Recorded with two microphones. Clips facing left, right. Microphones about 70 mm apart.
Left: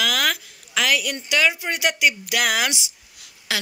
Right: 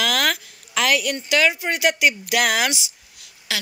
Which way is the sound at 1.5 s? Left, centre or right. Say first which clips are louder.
Right 3 dB; right.